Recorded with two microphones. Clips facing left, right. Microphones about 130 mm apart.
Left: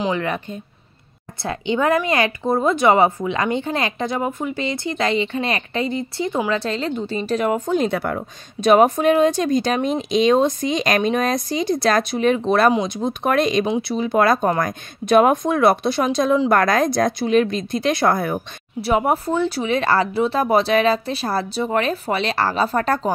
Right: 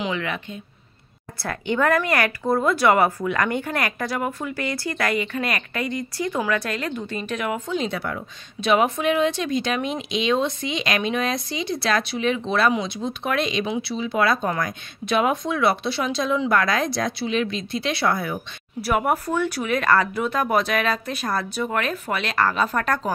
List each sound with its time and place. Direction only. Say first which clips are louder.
0.0 s a woman's voice: left 5 dB; 40° left (ahead or behind)
1.4 s speech: left 2 dB; 20° left (ahead or behind); by 18.4 s 45° left (ahead or behind)
18.8 s speech: left 3 dB; 25° left (ahead or behind)